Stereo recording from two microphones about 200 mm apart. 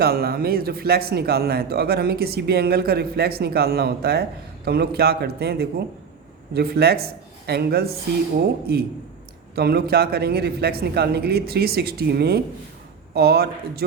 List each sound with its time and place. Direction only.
0.0 s speech: 50° right (ahead or behind)